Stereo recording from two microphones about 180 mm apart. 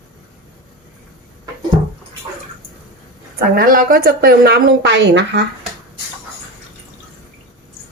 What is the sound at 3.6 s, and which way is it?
A woman's voice, 55° right (ahead or behind).